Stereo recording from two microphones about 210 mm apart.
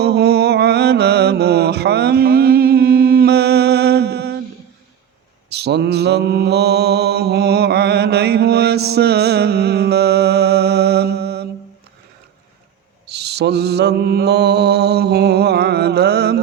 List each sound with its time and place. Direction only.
0.0 s mantra: 50° right (ahead or behind)
5.5 s mantra: 50° right (ahead or behind)
13.1 s mantra: 50° right (ahead or behind)